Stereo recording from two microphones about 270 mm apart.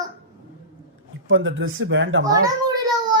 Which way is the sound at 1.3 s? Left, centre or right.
Right.